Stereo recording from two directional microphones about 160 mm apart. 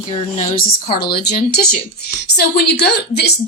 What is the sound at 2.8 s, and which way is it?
Speech, 90° left.